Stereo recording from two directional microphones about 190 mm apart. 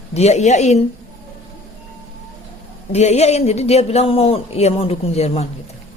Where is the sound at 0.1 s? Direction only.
35° left (ahead or behind).